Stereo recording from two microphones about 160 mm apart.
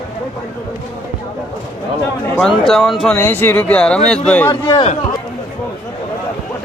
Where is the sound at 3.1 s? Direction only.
15° left (ahead or behind).